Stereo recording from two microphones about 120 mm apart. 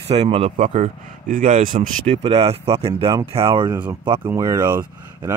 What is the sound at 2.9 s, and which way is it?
Speech, 40° right (ahead or behind).